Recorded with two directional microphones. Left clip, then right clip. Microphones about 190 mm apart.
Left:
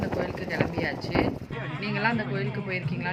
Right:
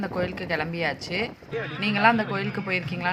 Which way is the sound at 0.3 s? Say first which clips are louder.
Right 1 dB; 25° right (ahead or behind).